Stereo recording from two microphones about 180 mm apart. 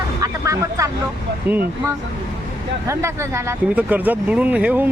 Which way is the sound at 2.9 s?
15° right (ahead or behind).